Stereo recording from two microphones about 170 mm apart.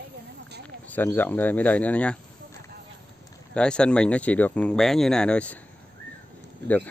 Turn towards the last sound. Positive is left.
turn(degrees=-90)